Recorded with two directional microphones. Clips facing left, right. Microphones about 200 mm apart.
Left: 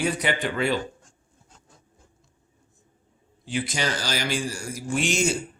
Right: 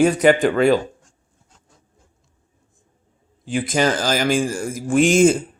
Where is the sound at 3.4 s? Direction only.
50° right (ahead or behind).